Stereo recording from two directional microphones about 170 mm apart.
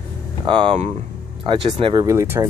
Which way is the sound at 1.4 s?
30° right (ahead or behind).